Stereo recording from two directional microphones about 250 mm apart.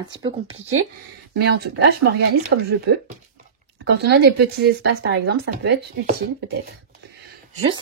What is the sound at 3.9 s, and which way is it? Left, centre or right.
Speech, right.